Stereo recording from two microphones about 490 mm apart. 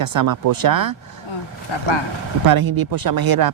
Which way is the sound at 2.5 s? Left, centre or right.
Right.